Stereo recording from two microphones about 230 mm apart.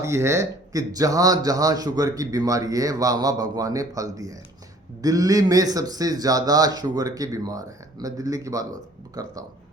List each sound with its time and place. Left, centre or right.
0.0 s speech: centre